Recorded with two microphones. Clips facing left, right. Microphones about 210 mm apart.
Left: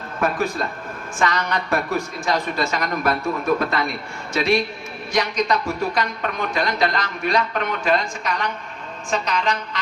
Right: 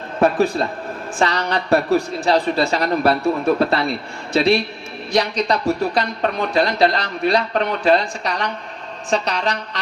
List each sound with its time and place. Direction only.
0.2 s a man's voice: 35° right (ahead or behind)